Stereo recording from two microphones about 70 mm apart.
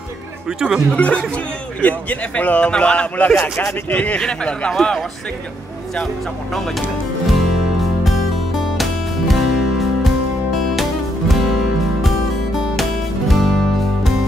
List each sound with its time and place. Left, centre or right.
0.5 s speech: centre
0.9 s a man's voice: centre
9.3 s music: centre
13.3 s music: centre